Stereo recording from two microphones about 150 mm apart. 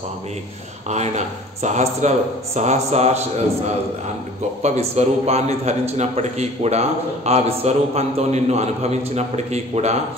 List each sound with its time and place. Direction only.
0.8 s a man's voice: 50° right (ahead or behind)